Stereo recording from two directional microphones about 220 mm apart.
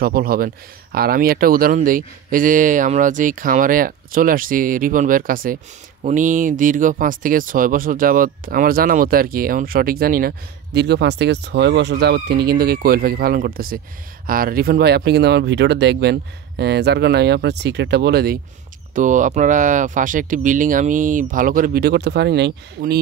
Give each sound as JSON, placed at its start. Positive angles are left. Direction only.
{"t": 0.0, "sound": "speech", "side_deg": -45}
{"t": 18.9, "sound": "speech", "side_deg": -35}